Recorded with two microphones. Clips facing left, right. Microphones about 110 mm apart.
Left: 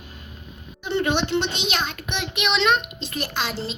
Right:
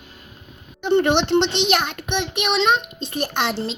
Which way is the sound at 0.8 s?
60° right (ahead or behind).